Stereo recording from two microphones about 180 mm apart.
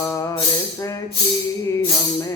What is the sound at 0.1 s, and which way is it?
Music, 15° left (ahead or behind).